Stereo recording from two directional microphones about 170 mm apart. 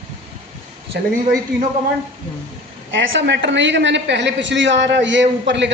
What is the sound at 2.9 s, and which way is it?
A woman's voice, 90° right.